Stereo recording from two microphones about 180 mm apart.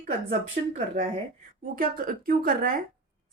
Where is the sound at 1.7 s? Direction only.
50° right (ahead or behind).